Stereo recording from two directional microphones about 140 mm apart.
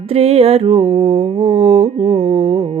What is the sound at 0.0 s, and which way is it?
Mantra, 45° right (ahead or behind).